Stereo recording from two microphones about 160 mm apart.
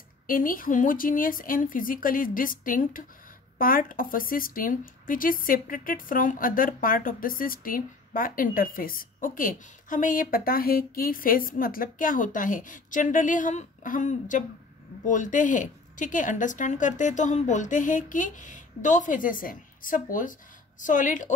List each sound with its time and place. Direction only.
0.3 s a woman's voice: 60° left (ahead or behind)